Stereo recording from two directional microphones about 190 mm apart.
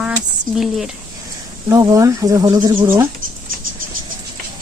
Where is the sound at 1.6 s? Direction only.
15° right (ahead or behind).